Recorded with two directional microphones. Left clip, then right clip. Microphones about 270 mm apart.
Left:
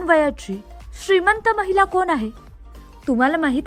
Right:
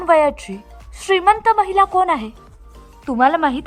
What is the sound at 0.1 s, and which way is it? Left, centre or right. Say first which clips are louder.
A woman's voice: right 3 dB; centre.